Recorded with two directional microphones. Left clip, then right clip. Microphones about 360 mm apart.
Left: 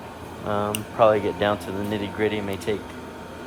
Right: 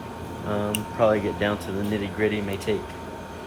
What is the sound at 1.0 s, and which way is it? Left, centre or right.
Speech, centre.